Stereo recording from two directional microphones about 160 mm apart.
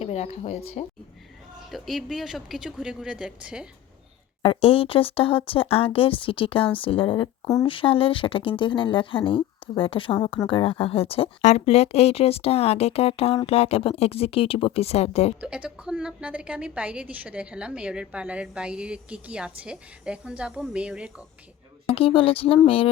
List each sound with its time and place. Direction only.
0.0 s speech: 40° left (ahead or behind)
1.7 s speech: centre (ahead or behind)
4.4 s speech: 35° left (ahead or behind)
7.4 s speech: 20° left (ahead or behind)
7.7 s speech: 35° left (ahead or behind)
15.4 s a woman's voice: 5° right (ahead or behind)
21.8 s speech: 35° left (ahead or behind)